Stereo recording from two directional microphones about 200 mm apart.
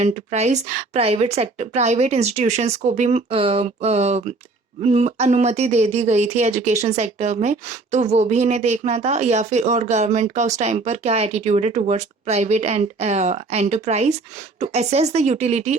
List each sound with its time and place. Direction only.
0.0 s speech: 35° right (ahead or behind)